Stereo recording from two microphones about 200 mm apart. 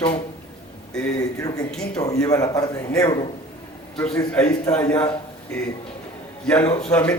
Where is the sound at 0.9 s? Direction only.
5° left (ahead or behind).